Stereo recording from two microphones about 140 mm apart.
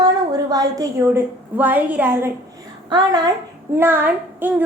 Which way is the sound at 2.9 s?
30° right (ahead or behind).